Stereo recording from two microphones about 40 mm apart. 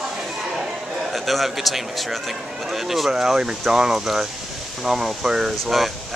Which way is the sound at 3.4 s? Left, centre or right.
Right.